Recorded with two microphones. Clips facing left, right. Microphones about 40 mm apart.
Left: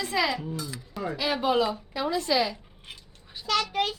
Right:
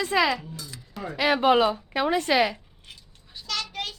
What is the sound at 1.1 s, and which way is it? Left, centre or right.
Speech, right.